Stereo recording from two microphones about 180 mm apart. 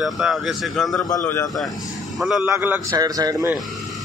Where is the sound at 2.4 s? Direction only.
10° right (ahead or behind).